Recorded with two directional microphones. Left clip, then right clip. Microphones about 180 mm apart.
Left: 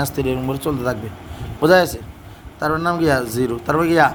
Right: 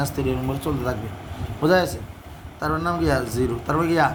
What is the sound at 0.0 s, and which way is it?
A man's voice, 40° left (ahead or behind).